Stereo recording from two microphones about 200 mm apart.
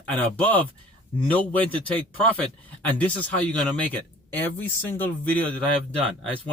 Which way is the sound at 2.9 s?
5° left (ahead or behind).